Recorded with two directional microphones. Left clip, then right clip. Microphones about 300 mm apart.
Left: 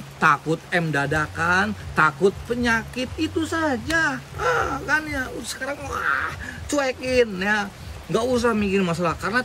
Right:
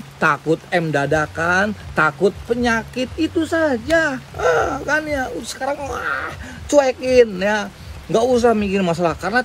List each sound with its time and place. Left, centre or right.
0.2 s speech: centre
1.2 s speech: right
1.5 s speech: centre